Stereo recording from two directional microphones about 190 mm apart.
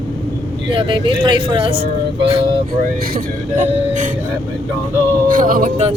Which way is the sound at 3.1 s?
45° right (ahead or behind).